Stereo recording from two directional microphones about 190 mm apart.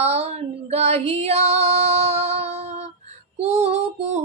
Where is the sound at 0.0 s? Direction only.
35° right (ahead or behind).